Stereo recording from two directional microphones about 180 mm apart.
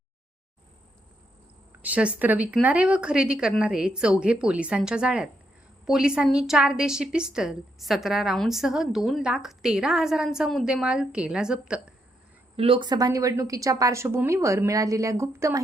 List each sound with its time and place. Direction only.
1.8 s a woman's voice: 5° right (ahead or behind)
12.5 s speech: 30° right (ahead or behind)